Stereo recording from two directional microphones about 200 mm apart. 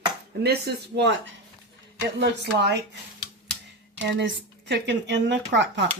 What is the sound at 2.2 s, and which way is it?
Speech, 55° right (ahead or behind).